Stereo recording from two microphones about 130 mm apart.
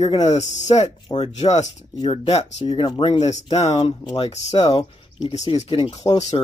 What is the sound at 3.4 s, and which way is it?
Speech, 55° left (ahead or behind).